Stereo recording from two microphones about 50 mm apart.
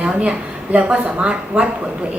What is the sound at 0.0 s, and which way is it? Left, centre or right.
A woman's voice, right.